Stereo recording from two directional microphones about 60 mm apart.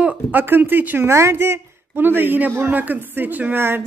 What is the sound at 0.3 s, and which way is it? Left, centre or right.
Speech, right.